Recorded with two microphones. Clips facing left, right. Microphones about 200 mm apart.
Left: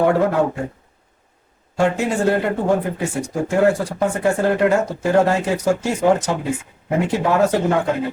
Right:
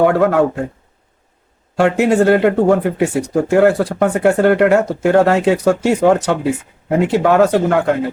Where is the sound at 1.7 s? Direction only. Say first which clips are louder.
Right 6 dB; 70° right (ahead or behind).